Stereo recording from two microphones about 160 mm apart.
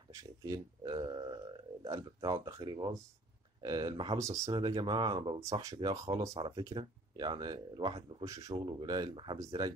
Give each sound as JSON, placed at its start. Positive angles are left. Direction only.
{"t": 0.1, "sound": "speech", "side_deg": -20}